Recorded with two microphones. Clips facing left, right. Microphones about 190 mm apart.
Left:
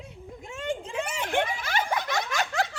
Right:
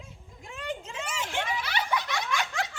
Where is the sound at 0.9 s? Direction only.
60° left (ahead or behind); by 2.5 s 40° left (ahead or behind).